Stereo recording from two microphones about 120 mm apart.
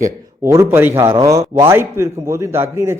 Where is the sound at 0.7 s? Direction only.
15° right (ahead or behind).